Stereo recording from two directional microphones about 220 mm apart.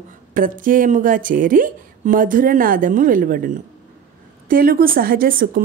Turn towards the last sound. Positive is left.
turn(degrees=-40)  # may be behind; listen again after turning